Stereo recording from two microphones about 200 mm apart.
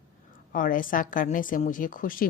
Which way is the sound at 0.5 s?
45° left (ahead or behind).